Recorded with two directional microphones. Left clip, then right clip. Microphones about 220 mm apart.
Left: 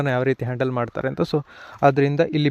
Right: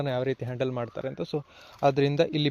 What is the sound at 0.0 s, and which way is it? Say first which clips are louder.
Speech: left 7 dB; 40° left (ahead or behind).